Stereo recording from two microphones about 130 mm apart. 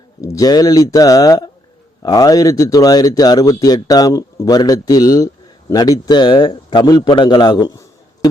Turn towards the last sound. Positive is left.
turn(degrees=25)  # may be behind; listen again after turning